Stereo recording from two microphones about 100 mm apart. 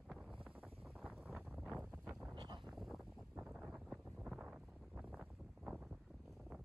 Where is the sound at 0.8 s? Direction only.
Centre (ahead or behind).